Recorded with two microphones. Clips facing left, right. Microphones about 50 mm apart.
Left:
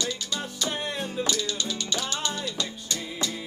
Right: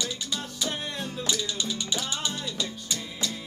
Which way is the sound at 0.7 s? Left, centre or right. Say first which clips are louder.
Left 3 dB; centre.